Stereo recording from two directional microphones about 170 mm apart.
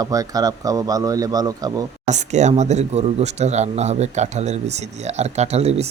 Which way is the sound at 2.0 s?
45° right (ahead or behind).